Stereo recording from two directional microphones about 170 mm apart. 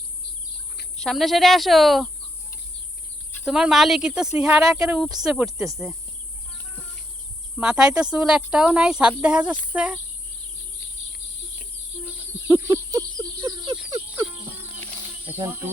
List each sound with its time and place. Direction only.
0.9 s speech: centre (ahead or behind)
3.4 s speech: 5° right (ahead or behind)
7.5 s speech: 5° right (ahead or behind)
12.0 s a sound: 15° right (ahead or behind)
15.2 s cricket: 10° right (ahead or behind)